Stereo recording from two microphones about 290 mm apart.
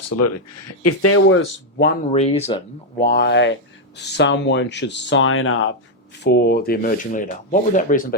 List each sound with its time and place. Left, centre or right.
0.2 s speech: left
2.1 s speech: left